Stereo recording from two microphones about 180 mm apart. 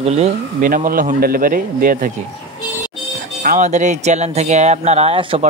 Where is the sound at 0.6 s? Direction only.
50° right (ahead or behind).